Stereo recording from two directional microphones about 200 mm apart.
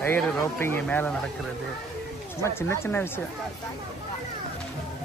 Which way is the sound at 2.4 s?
15° left (ahead or behind).